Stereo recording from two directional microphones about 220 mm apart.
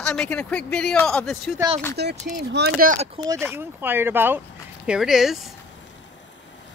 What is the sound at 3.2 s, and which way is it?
Speech, 25° right (ahead or behind).